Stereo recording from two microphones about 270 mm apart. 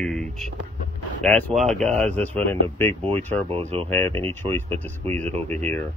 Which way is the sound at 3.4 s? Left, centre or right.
Right.